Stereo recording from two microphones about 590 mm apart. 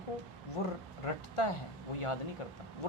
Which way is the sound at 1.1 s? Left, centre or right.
Left.